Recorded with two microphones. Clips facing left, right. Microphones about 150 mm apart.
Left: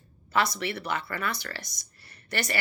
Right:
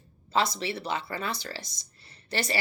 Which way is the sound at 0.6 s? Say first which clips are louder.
Even; 60° left (ahead or behind).